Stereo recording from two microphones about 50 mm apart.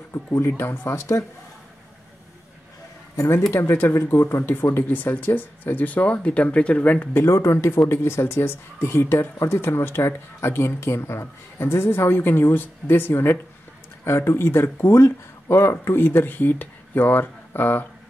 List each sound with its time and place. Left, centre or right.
0.1 s speech: left
3.5 s speech: left
7.2 s speech: left
15.0 s speech: left
15.7 s speech: left